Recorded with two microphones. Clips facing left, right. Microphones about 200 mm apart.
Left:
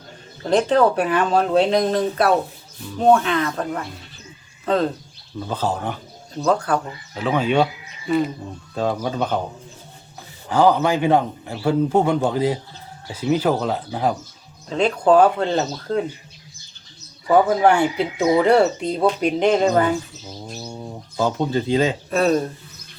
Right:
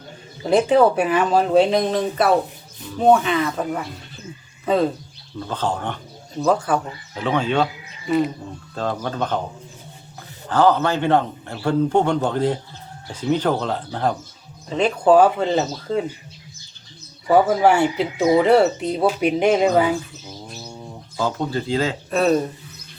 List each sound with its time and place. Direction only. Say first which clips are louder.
0.4 s speech: right 1 dB; 10° right (ahead or behind)
5.4 s speech: left 1 dB; 5° left (ahead or behind)
8.0 s speech: right 1 dB; centre (ahead or behind)
8.7 s a man's voice: left 3 dB; 10° left (ahead or behind)
10.5 s a man's voice: left 1 dB; 10° left (ahead or behind)
14.7 s speech: right 1 dB; 5° right (ahead or behind)
17.2 s speech: even; 5° right (ahead or behind)
21.2 s speech: left 3 dB; 15° left (ahead or behind)
22.1 s speech: right 2 dB; centre (ahead or behind)